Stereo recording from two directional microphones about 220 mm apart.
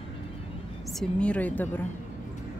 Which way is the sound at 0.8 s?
5° left (ahead or behind).